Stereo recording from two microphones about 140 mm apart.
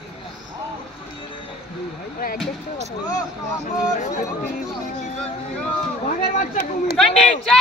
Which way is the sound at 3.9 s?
55° left (ahead or behind).